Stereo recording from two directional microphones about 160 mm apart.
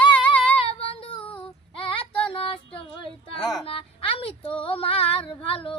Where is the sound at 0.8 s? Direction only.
35° left (ahead or behind).